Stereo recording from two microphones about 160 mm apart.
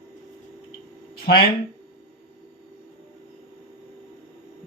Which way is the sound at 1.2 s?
70° left (ahead or behind).